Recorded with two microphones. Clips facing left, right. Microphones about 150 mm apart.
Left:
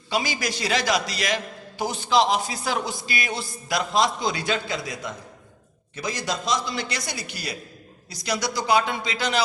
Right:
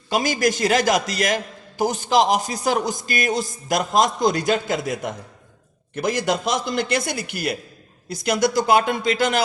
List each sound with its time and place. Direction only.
0.1 s a man's voice: 45° right (ahead or behind)